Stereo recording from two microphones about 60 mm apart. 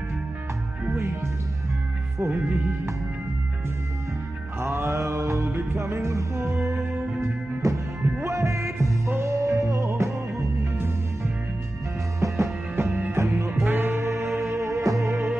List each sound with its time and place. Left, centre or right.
0.9 s music: right
4.6 s mantra: right
5.7 s music: right
12.2 s music: right
12.8 s music: right
13.6 s music: right